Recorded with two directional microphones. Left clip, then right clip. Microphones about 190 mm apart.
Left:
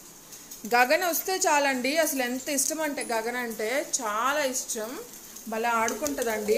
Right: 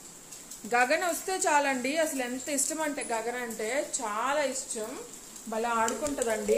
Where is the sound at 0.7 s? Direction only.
20° left (ahead or behind).